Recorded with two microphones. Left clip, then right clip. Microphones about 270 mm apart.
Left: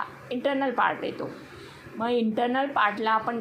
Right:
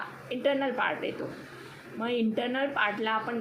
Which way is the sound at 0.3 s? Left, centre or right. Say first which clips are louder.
Left 1 dB; left.